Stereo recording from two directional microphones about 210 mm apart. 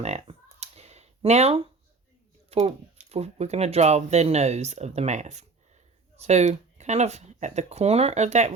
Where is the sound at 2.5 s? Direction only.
30° right (ahead or behind).